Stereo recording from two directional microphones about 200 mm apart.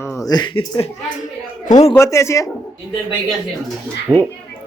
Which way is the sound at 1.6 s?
35° left (ahead or behind).